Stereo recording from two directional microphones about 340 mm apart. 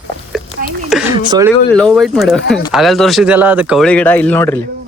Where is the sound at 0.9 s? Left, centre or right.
Centre.